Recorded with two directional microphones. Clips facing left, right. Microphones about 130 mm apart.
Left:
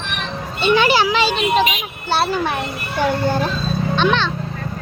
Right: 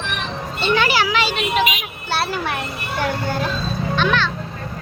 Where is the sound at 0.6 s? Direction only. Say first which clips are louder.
Left 4 dB; 20° left (ahead or behind).